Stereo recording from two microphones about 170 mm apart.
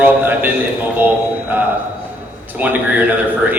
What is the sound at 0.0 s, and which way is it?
Speech, 10° right (ahead or behind).